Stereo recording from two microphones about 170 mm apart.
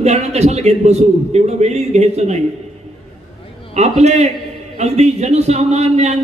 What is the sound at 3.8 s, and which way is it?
A man's voice, 40° right (ahead or behind).